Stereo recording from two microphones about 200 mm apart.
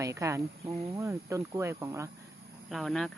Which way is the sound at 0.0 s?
15° right (ahead or behind).